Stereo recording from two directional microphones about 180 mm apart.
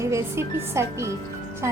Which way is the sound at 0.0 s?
15° right (ahead or behind).